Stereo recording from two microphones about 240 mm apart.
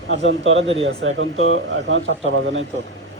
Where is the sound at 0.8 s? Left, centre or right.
Right.